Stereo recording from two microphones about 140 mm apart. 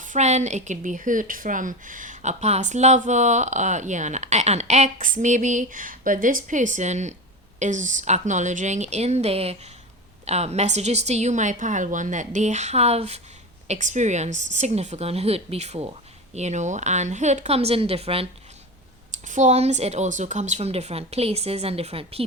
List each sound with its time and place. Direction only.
0.0 s a woman's voice: 60° right (ahead or behind)
13.7 s a woman's voice: 60° right (ahead or behind); by 18.3 s 45° right (ahead or behind)
19.3 s a woman's voice: 55° right (ahead or behind)